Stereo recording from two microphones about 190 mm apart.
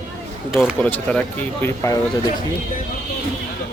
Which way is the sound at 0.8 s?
5° left (ahead or behind).